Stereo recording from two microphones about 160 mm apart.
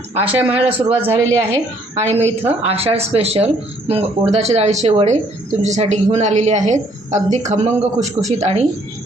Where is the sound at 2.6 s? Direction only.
40° right (ahead or behind).